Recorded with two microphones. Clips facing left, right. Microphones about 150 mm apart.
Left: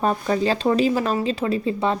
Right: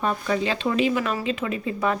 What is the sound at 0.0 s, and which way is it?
A woman's voice, 35° left (ahead or behind).